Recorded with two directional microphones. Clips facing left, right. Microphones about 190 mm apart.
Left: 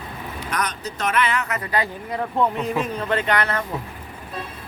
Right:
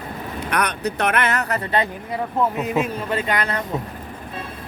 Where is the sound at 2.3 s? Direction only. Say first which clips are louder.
Right 1 dB; 5° right (ahead or behind).